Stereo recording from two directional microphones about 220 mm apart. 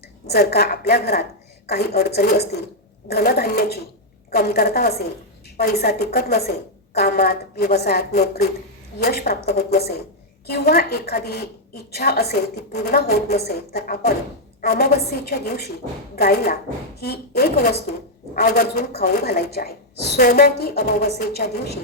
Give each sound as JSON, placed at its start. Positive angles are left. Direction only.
{"t": 0.3, "sound": "a woman's voice", "side_deg": 45}